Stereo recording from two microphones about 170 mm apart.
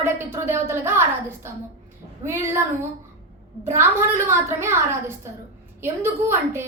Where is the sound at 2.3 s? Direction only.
15° right (ahead or behind).